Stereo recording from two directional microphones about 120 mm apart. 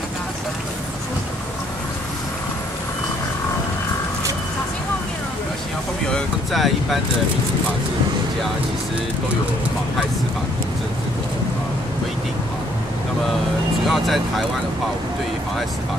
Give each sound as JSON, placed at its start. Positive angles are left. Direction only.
{"t": 6.1, "sound": "vehicle", "side_deg": 0}
{"t": 13.8, "sound": "speech", "side_deg": 0}